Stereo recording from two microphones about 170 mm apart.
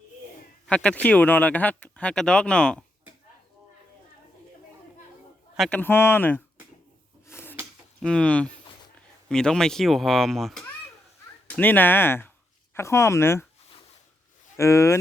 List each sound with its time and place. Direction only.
0.7 s speech: 5° left (ahead or behind)
5.5 s speech: 5° left (ahead or behind)
7.3 s drawer open or close: 15° left (ahead or behind)
8.0 s speech: 5° left (ahead or behind)
14.5 s speech: 15° left (ahead or behind)